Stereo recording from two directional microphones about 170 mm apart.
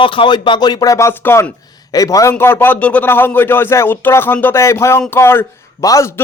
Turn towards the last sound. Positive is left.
turn(degrees=20)  # may be behind; listen again after turning